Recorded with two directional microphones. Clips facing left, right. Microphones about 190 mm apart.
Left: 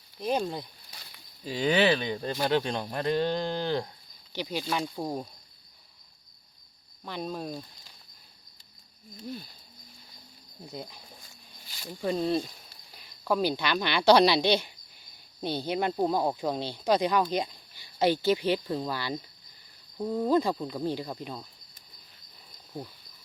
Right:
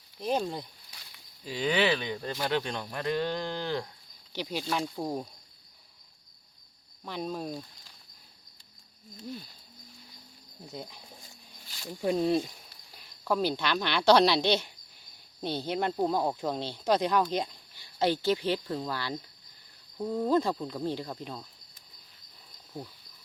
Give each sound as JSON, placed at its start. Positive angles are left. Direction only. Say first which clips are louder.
{"t": 0.2, "sound": "speech", "louder": "left 1 dB", "side_deg": 5}
{"t": 1.5, "sound": "speech", "louder": "left 3 dB", "side_deg": 35}
{"t": 4.3, "sound": "speech", "louder": "left 1 dB", "side_deg": 0}
{"t": 7.0, "sound": "speech", "louder": "even", "side_deg": 0}
{"t": 10.7, "sound": "speech", "louder": "left 1 dB", "side_deg": 0}
{"t": 11.9, "sound": "speech", "louder": "right 1 dB", "side_deg": -10}
{"t": 13.0, "sound": "speech", "louder": "left 1 dB", "side_deg": 5}